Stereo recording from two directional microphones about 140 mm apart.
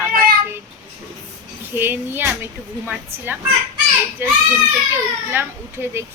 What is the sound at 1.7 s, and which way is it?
Speech, 15° right (ahead or behind).